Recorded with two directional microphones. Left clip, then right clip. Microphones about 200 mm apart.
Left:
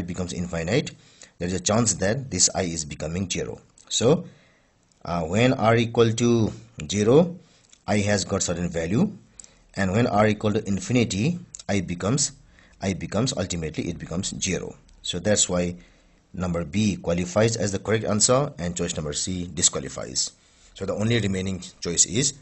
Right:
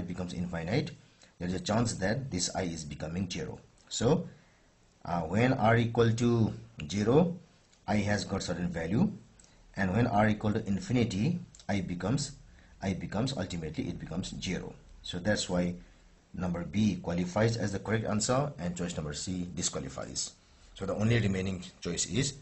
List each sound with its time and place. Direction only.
0.1 s speech: 45° left (ahead or behind)